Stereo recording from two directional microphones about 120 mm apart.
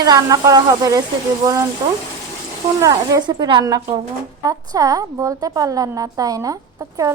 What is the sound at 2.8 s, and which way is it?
A woman's voice, 35° right (ahead or behind).